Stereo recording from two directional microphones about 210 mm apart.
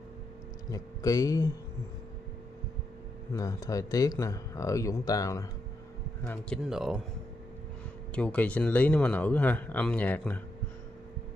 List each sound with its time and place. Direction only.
0.7 s a man's voice: 15° left (ahead or behind)
3.3 s a man's voice: 15° left (ahead or behind); by 7.0 s centre (ahead or behind)
8.1 s a man's voice: 5° left (ahead or behind)